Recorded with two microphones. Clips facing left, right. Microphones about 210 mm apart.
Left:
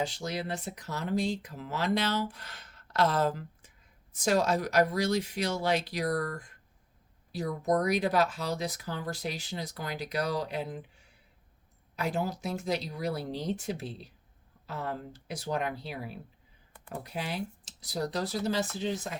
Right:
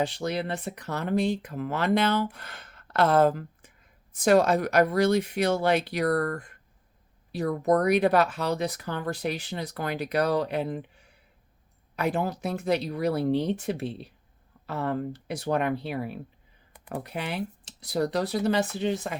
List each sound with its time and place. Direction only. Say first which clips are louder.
0.0 s speech: right 5 dB; 60° right (ahead or behind)
11.9 s speech: right 4 dB; 60° right (ahead or behind)